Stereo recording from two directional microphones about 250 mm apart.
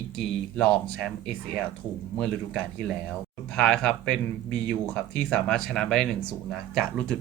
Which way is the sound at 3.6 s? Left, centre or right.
Centre.